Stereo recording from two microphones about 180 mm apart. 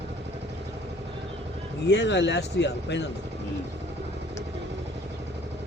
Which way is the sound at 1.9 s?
75° left (ahead or behind).